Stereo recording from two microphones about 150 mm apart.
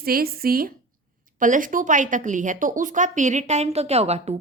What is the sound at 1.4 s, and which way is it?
A woman's voice, 60° right (ahead or behind).